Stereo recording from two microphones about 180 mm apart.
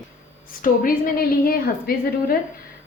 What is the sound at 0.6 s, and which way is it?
A woman's voice, 50° left (ahead or behind).